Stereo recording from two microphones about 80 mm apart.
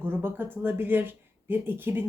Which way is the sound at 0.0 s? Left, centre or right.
Right.